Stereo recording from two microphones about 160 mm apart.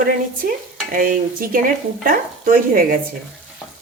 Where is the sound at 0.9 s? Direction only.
60° right (ahead or behind).